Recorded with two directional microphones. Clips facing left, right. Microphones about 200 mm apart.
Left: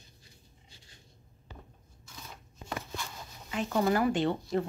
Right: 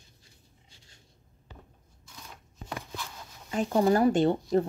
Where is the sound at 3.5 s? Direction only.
35° right (ahead or behind).